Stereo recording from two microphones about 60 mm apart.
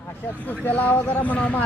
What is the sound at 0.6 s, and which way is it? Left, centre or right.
A man's voice, left.